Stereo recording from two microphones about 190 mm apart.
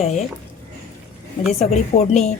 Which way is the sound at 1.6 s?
35° left (ahead or behind).